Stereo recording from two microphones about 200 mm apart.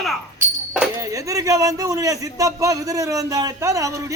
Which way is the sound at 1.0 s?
15° right (ahead or behind).